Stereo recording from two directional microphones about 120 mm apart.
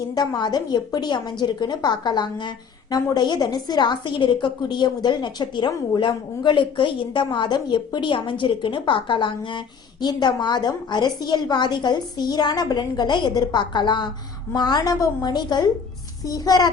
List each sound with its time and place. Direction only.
0.1 s a woman's voice: 35° left (ahead or behind)